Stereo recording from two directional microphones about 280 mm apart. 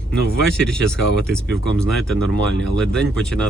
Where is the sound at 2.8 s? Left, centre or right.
Centre.